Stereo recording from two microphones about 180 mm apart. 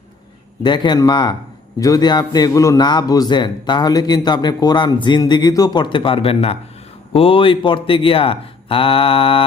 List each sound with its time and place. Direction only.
0.6 s a man's voice: 25° left (ahead or behind)